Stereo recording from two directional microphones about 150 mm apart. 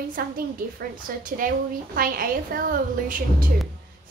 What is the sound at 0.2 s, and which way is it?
Speech, 80° right.